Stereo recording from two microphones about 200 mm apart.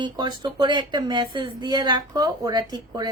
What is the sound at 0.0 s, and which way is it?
Speech, 20° right (ahead or behind).